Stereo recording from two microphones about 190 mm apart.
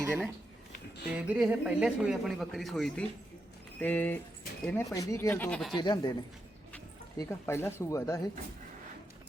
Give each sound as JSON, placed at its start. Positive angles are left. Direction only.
{"t": 0.0, "sound": "speech", "side_deg": -10}
{"t": 5.7, "sound": "a woman's voice", "side_deg": 20}
{"t": 7.2, "sound": "speech", "side_deg": 15}